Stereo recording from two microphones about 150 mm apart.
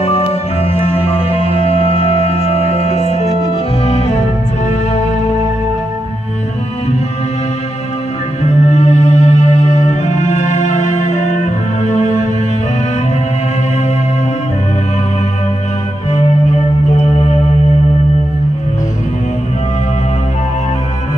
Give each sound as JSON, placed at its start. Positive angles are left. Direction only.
{"t": 0.0, "sound": "music", "side_deg": 40}
{"t": 8.6, "sound": "music", "side_deg": 50}
{"t": 16.2, "sound": "music", "side_deg": 50}